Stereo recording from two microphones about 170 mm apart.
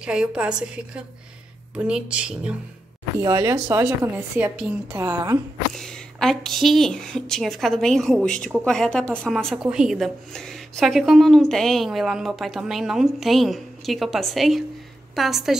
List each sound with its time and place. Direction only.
0.0 s a woman's voice: 5° right (ahead or behind)
3.2 s a woman's voice: 20° right (ahead or behind)
5.8 s a woman's voice: 5° left (ahead or behind)